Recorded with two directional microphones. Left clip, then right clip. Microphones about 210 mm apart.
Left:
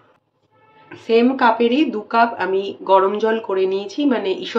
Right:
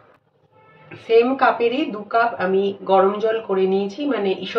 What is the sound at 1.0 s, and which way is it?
A woman's voice, 55° left (ahead or behind).